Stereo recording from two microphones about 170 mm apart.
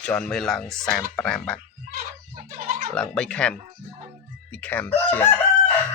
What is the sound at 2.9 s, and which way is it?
Speech, 5° left (ahead or behind).